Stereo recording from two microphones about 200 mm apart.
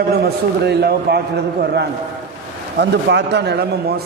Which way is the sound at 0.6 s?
55° right (ahead or behind).